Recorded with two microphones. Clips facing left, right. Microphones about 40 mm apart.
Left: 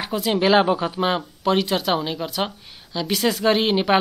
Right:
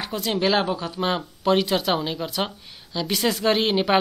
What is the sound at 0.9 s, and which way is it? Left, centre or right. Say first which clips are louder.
A man's voice: left 3 dB; centre.